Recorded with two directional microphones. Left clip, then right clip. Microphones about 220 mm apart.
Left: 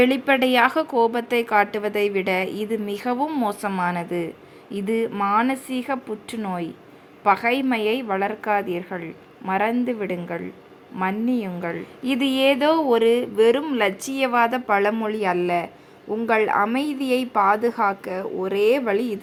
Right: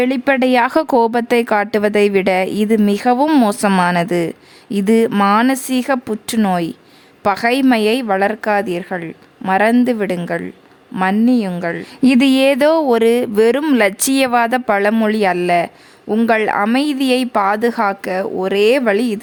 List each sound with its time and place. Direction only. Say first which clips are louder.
0.0 s a woman's voice: right 3 dB; 35° right (ahead or behind)